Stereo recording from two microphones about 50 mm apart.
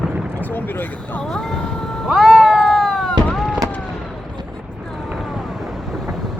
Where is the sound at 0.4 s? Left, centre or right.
Left.